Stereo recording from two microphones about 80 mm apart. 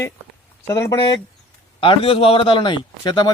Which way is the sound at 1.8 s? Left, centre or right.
Left.